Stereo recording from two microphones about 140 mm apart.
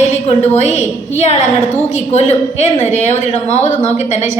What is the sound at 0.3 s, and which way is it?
Speech, 50° left (ahead or behind).